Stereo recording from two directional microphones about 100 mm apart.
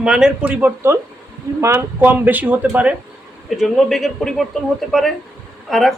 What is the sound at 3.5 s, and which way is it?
Speech, centre (ahead or behind).